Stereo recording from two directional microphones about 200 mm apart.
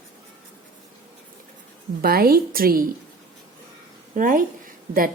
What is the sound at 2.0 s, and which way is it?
Speech, 50° right (ahead or behind).